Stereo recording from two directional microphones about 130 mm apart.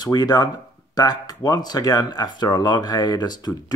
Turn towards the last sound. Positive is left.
turn(degrees=30)  # may be behind; listen again after turning